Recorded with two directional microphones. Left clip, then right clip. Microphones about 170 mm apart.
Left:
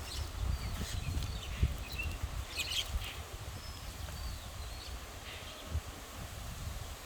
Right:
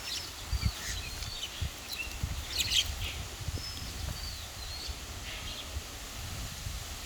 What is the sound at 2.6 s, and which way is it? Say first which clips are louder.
Bird: right 8 dB; 25° left (ahead or behind).